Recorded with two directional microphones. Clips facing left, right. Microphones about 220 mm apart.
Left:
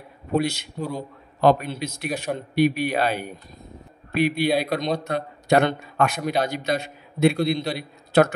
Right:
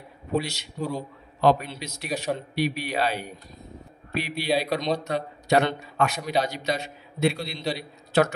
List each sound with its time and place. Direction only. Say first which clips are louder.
0.4 s a man's voice: left 6 dB; 55° left (ahead or behind)